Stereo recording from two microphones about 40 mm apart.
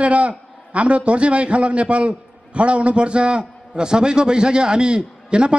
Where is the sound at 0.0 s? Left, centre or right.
Right.